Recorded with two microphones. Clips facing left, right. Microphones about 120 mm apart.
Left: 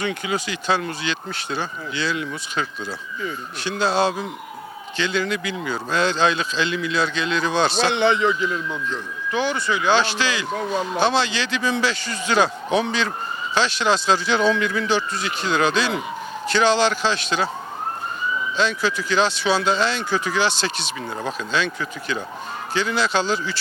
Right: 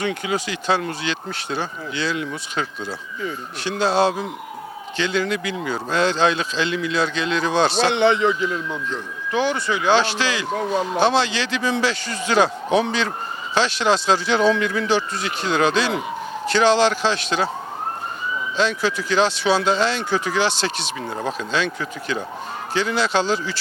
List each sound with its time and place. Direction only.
0.0 s speech: 45° right (ahead or behind)
7.7 s speech: 55° right (ahead or behind)
10.5 s speech: 40° right (ahead or behind)
11.0 s speech: 60° right (ahead or behind)
16.5 s speech: 60° right (ahead or behind)
18.5 s speech: 50° right (ahead or behind)
21.5 s speech: 45° right (ahead or behind)